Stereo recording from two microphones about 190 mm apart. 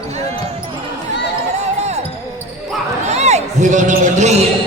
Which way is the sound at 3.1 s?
35° right (ahead or behind).